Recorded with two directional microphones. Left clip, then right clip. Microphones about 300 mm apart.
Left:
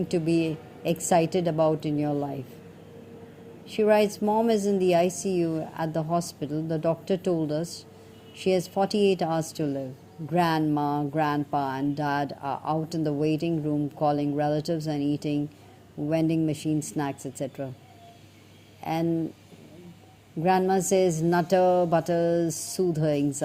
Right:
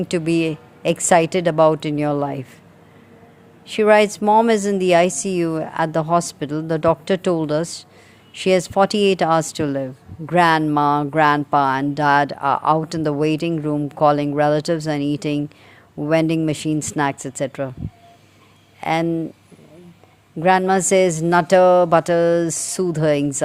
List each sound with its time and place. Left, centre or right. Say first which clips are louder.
0.1 s speech: right 6 dB; right
3.8 s speech: right 8 dB; right
18.8 s speech: right 8 dB; right
20.4 s speech: right 8 dB; right